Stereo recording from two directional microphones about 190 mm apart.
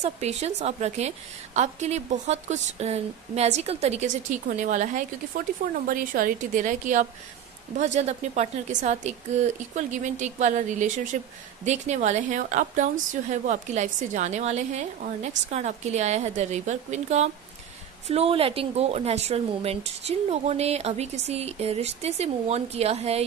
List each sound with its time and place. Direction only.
0.0 s a woman's voice: 35° right (ahead or behind)